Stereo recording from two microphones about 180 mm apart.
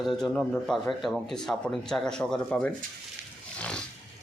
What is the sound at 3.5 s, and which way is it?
Roaring cats, 5° left (ahead or behind).